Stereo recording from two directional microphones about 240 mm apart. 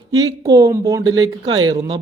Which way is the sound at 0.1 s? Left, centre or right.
Centre.